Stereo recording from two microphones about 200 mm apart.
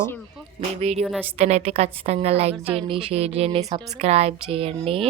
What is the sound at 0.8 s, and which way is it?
Speech, 30° right (ahead or behind).